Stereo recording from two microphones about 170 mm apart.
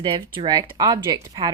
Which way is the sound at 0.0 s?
30° right (ahead or behind).